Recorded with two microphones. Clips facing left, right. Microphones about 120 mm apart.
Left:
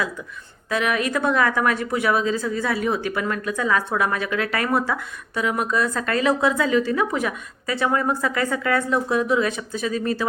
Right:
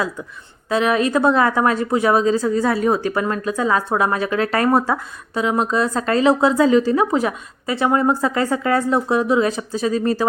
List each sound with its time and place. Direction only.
0.7 s a woman's voice: 30° right (ahead or behind)